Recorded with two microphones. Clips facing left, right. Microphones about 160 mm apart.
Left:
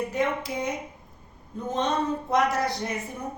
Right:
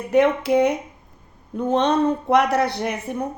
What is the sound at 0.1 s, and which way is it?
A woman's voice, 70° right (ahead or behind).